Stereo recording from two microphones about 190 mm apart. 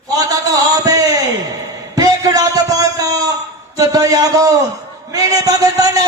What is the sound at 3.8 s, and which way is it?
A man's voice, 20° right (ahead or behind).